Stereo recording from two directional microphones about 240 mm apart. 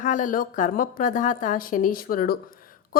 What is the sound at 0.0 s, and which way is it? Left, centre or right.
A woman's voice, left.